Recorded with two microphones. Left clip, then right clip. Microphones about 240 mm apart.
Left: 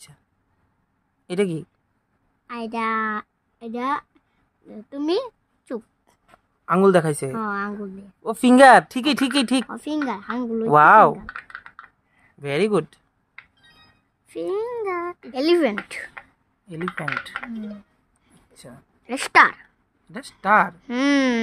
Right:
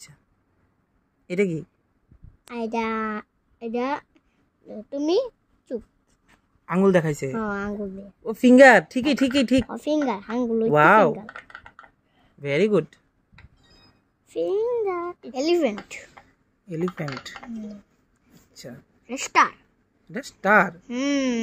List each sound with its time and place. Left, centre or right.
1.3 s a child's voice: left
2.4 s a woman's voice: centre
11.2 s typing: centre
12.4 s a woman's voice: centre
13.4 s a sound: centre
14.3 s a child's voice: centre
16.8 s a woman's voice: centre
17.6 s a child's voice: left
19.0 s a woman's voice: left
20.1 s speech: centre
20.8 s a child's voice: left